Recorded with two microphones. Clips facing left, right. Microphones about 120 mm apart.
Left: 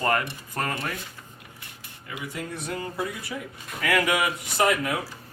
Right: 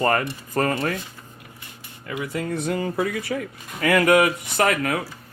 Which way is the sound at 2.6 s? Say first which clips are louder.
Right 5 dB; 90° right.